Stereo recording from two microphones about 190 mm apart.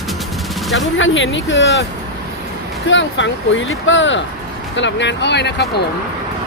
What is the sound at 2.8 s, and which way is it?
Speech, 80° left.